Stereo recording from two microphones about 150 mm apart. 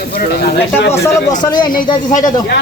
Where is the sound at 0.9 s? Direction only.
55° left (ahead or behind).